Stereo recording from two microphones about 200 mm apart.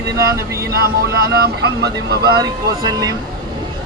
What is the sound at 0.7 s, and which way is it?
Speech, 50° right (ahead or behind).